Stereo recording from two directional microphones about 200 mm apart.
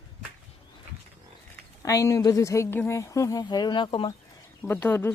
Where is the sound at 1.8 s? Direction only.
15° left (ahead or behind).